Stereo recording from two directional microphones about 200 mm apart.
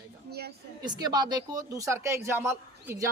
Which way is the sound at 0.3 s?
50° right (ahead or behind).